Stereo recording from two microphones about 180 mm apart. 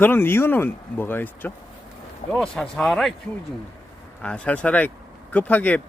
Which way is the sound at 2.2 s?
40° left (ahead or behind).